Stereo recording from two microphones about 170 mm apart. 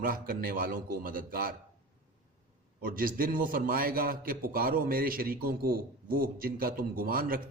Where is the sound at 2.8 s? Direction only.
60° right (ahead or behind).